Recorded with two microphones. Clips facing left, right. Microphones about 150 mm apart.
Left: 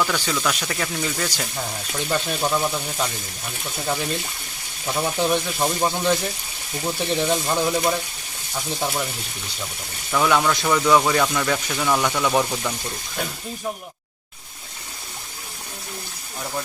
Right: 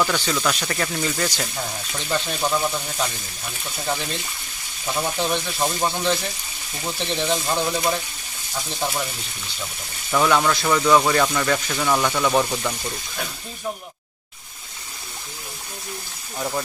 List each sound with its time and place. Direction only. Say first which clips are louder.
0.0 s speech: right 1 dB; 5° right (ahead or behind)
4.9 s speech: left 3 dB; 5° left (ahead or behind)
10.1 s speech: right 1 dB; 5° right (ahead or behind)